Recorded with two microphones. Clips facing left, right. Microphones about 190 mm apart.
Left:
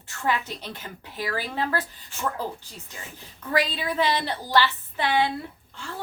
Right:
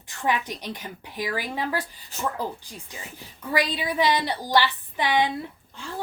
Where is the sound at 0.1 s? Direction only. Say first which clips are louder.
Right 1 dB; 15° right (ahead or behind).